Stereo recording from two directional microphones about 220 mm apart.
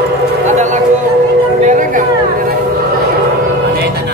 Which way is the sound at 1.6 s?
35° right (ahead or behind).